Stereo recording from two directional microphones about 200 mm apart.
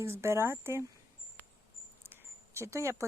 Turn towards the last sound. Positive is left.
turn(degrees=-15)  # may be behind; listen again after turning